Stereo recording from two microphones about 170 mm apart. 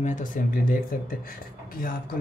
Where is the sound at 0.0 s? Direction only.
50° left (ahead or behind).